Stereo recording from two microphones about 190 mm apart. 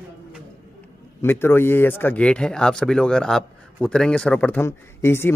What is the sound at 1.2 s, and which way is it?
Speech, 10° left (ahead or behind).